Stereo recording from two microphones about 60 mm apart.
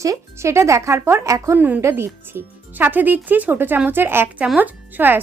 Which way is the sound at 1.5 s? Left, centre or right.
Right.